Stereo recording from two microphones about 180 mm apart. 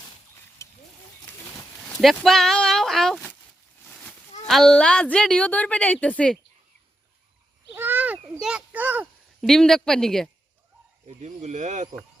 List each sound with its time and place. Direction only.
0.6 s wild animals: 15° left (ahead or behind)
1.9 s speech: centre (ahead or behind)
3.8 s goat: 5° left (ahead or behind)
4.4 s a woman's voice: centre (ahead or behind)
7.8 s a sound: 10° right (ahead or behind)
8.2 s a child's voice: 5° right (ahead or behind)
9.4 s a woman's voice: 5° left (ahead or behind)
11.2 s speech: 40° right (ahead or behind)